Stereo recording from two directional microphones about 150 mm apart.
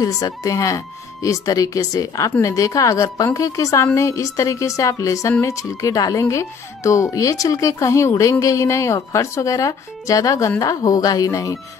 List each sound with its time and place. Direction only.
0.0 s speech: 25° left (ahead or behind)